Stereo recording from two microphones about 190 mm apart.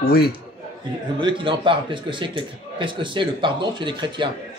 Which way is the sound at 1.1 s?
25° right (ahead or behind).